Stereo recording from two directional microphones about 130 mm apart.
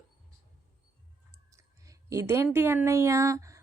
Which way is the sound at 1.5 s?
25° right (ahead or behind).